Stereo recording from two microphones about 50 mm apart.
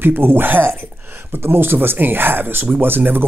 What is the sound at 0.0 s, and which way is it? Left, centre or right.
Speech, right.